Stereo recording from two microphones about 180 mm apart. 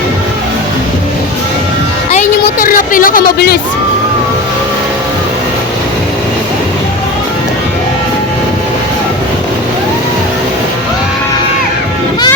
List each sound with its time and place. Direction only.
2.6 s speech: 50° left (ahead or behind)